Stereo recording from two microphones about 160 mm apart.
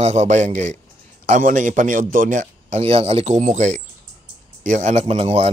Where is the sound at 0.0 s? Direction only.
45° right (ahead or behind).